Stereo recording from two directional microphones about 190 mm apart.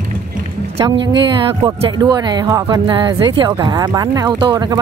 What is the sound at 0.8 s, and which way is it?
Speech, 20° right (ahead or behind).